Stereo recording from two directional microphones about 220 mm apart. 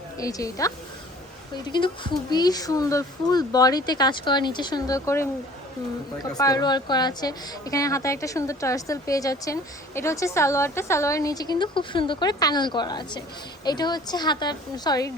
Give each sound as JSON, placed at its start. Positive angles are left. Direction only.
{"t": 0.2, "sound": "a woman's voice", "side_deg": 15}
{"t": 1.7, "sound": "a woman's voice", "side_deg": 20}
{"t": 6.3, "sound": "a woman's voice", "side_deg": 15}